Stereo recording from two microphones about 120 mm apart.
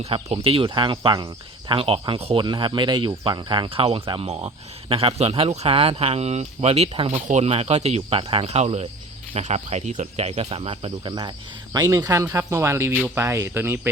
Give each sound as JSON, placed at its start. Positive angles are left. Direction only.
{"t": 0.0, "sound": "speech", "side_deg": -55}
{"t": 7.1, "sound": "speech", "side_deg": -75}
{"t": 11.1, "sound": "speech", "side_deg": -35}